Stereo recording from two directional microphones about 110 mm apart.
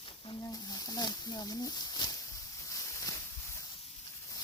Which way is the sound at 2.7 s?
30° left (ahead or behind).